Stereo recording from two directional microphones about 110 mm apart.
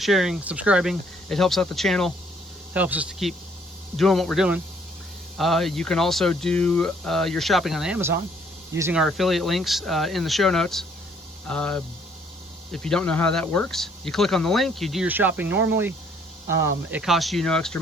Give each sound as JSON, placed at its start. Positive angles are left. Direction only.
{"t": 0.0, "sound": "speech", "side_deg": 0}
{"t": 1.3, "sound": "speech", "side_deg": 5}
{"t": 2.7, "sound": "speech", "side_deg": -15}
{"t": 3.9, "sound": "speech", "side_deg": 5}
{"t": 7.9, "sound": "speech", "side_deg": -20}
{"t": 8.9, "sound": "speech", "side_deg": -5}
{"t": 15.0, "sound": "speech", "side_deg": -15}
{"t": 17.0, "sound": "speech", "side_deg": 0}